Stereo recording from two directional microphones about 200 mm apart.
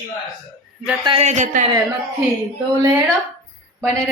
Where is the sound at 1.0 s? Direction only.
25° right (ahead or behind).